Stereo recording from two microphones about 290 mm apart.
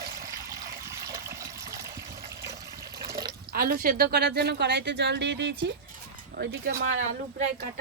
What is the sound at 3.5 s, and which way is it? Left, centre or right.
Speech, right.